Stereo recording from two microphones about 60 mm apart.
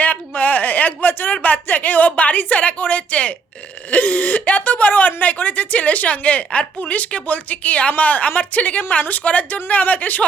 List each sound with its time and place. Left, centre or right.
0.0 s a woman's voice: left